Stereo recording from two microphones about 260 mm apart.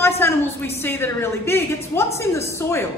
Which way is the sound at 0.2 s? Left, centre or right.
Centre.